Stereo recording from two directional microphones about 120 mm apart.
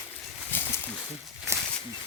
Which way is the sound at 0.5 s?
15° left (ahead or behind).